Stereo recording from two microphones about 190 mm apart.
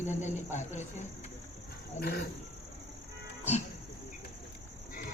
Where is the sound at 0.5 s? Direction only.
35° left (ahead or behind).